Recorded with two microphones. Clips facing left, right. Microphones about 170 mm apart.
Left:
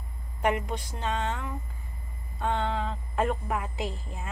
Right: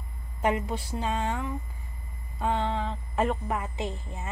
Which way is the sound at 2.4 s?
Centre (ahead or behind).